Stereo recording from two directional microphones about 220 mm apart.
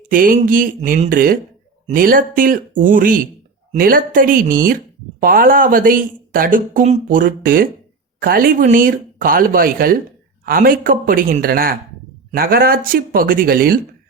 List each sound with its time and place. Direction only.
0.1 s speech: 40° right (ahead or behind)